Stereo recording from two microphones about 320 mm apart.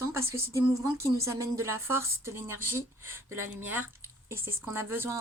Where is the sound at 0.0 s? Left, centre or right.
Centre.